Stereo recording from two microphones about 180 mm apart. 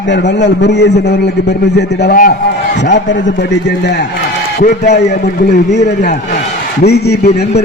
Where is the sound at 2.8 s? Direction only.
80° left.